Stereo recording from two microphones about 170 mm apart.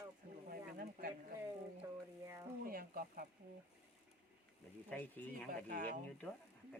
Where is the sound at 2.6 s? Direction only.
60° right (ahead or behind).